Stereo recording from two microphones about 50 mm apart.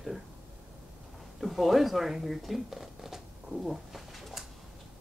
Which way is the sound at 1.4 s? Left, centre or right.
Centre.